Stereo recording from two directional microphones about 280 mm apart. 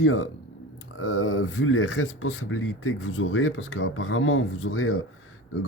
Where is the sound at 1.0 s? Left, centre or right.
Left.